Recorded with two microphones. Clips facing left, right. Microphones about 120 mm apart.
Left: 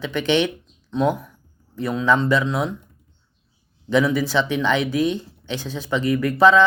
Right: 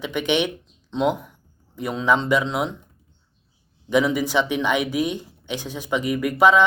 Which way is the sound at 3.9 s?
15° right (ahead or behind).